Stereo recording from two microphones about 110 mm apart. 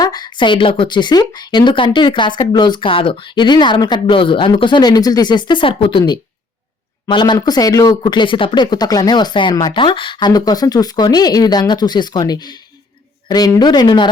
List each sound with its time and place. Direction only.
0.0 s speech: 40° left (ahead or behind)